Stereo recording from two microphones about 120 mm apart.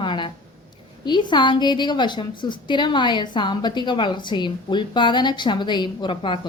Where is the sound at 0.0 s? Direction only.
40° left (ahead or behind).